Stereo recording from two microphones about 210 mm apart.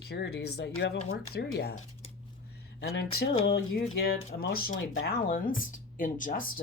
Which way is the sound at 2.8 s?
50° left (ahead or behind).